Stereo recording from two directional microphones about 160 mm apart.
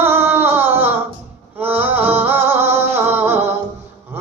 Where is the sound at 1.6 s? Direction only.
10° right (ahead or behind).